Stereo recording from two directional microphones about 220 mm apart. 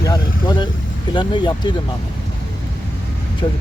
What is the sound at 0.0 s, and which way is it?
Vehicle, 20° left (ahead or behind).